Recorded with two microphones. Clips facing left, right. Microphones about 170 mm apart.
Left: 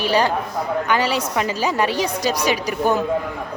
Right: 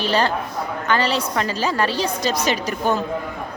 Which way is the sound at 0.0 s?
15° left (ahead or behind).